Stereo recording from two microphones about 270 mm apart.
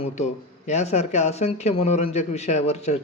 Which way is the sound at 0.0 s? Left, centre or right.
Left.